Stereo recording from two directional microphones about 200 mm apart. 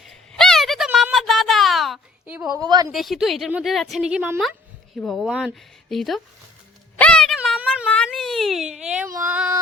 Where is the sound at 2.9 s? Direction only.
Centre (ahead or behind).